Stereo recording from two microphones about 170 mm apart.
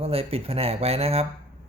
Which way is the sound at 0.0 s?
35° right (ahead or behind).